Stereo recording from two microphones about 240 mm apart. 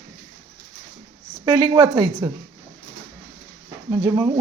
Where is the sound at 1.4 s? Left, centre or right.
Centre.